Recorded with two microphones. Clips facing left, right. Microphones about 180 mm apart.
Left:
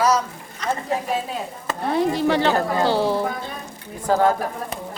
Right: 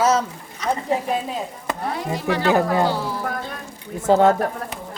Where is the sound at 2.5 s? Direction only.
15° right (ahead or behind).